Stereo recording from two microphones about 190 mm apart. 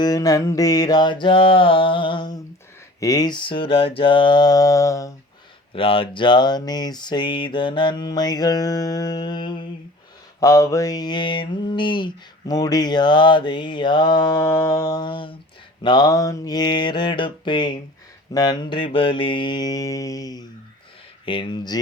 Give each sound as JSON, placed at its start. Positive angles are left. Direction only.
{"t": 0.0, "sound": "mantra", "side_deg": 20}
{"t": 5.7, "sound": "mantra", "side_deg": 30}